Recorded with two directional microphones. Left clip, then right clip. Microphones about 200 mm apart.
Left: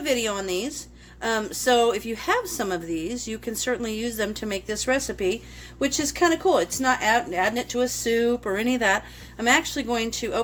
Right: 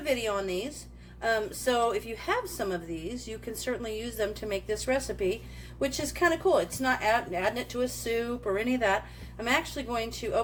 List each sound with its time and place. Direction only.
0.0 s a woman's voice: 50° left (ahead or behind)